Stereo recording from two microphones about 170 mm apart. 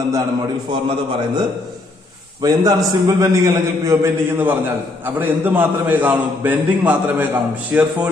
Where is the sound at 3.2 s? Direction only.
20° right (ahead or behind).